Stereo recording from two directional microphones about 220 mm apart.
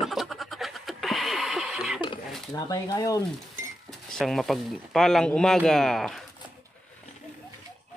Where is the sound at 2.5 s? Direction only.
15° left (ahead or behind).